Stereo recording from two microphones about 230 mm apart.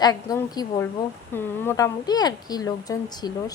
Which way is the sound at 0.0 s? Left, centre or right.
Centre.